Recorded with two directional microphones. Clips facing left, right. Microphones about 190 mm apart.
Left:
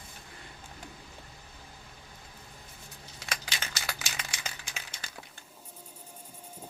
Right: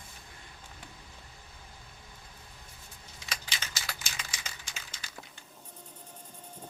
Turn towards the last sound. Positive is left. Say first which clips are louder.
# left 3 dB
turn(degrees=60)  # may be behind; listen again after turning